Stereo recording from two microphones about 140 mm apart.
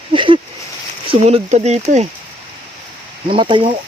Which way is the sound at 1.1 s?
45° right (ahead or behind).